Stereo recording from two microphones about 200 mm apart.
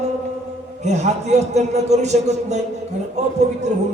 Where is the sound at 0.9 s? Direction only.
35° right (ahead or behind).